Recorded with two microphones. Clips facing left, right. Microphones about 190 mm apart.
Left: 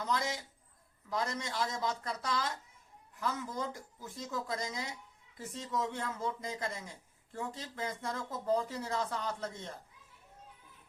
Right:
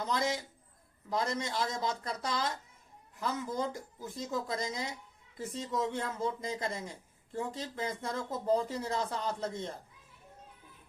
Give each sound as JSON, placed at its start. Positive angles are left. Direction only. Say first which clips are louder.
{"t": 1.1, "sound": "speech", "louder": "right 3 dB", "side_deg": -25}